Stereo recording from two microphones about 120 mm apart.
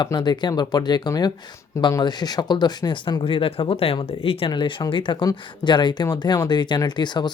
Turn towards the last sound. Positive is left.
turn(degrees=40)  # may be behind; listen again after turning